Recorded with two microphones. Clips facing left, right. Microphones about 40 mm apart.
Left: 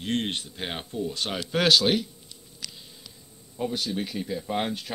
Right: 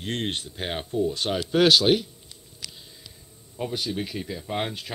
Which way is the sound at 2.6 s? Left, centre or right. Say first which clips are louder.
Even; right.